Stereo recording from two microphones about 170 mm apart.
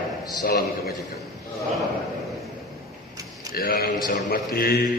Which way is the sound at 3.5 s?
60° left (ahead or behind).